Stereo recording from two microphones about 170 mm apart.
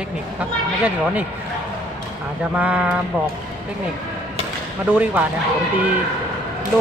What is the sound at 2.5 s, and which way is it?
Speech, 10° right (ahead or behind).